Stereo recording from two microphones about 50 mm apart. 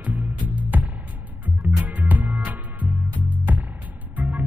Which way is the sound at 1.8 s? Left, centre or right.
Right.